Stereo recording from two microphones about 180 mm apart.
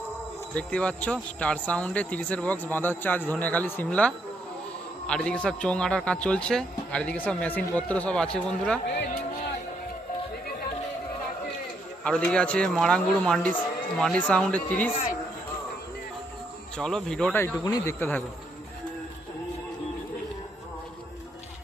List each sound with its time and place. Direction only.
0.5 s speech: 5° left (ahead or behind)
8.9 s music: 70° left (ahead or behind)
12.0 s speech: 5° left (ahead or behind)
16.7 s speech: 5° left (ahead or behind)
17.4 s speech: 15° left (ahead or behind)